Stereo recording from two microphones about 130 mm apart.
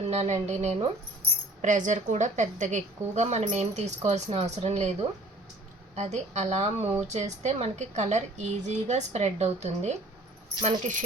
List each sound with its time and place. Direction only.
0.1 s a woman's voice: 60° right (ahead or behind)
1.6 s a woman's voice: 75° right (ahead or behind)
10.6 s a woman's voice: 75° right (ahead or behind)